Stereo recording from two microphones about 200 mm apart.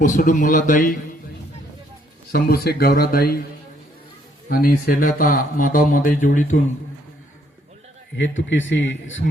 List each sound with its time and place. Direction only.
0.0 s speech: 40° left (ahead or behind)
2.3 s speech: 50° left (ahead or behind)
4.4 s speech: 45° left (ahead or behind)
8.1 s speech: 70° left (ahead or behind)